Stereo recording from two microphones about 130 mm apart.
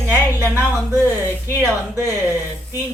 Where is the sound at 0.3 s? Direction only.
20° right (ahead or behind).